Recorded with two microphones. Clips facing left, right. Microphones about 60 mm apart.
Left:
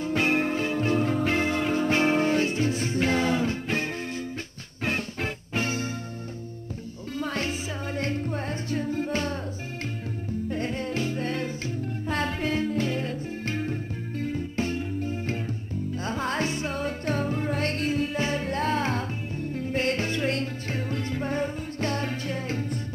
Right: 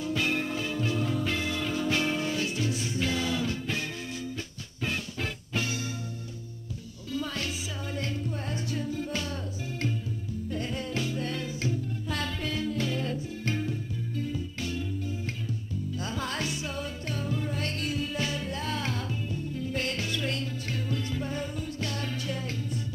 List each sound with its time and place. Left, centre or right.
0.0 s music: left
4.8 s music: left
7.2 s music: left
10.5 s music: left